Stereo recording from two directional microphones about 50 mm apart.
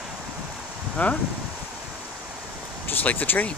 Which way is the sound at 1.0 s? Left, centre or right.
Left.